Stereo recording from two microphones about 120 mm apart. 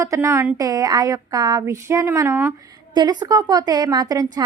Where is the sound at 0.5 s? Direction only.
30° right (ahead or behind).